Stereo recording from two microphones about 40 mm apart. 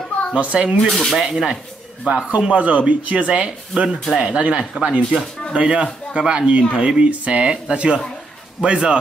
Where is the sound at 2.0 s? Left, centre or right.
Right.